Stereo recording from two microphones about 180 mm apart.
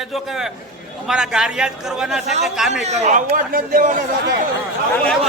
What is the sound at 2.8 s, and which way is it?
A man's voice, 40° right (ahead or behind).